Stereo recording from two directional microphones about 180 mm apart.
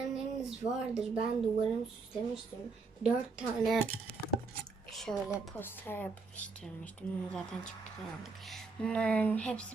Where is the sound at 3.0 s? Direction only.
Centre (ahead or behind).